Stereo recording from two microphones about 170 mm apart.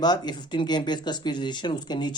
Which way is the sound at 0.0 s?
25° left (ahead or behind).